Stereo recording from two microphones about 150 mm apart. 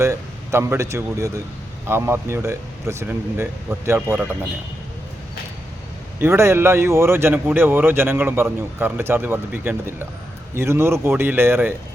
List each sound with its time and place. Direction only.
0.0 s speech: 20° right (ahead or behind)
6.1 s speech: 15° right (ahead or behind)